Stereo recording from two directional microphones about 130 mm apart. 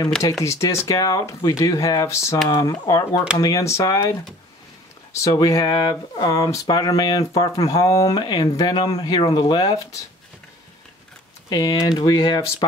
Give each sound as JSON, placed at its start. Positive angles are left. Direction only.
{"t": 0.2, "sound": "speech", "side_deg": 20}
{"t": 5.1, "sound": "speech", "side_deg": 25}
{"t": 11.4, "sound": "speech", "side_deg": 30}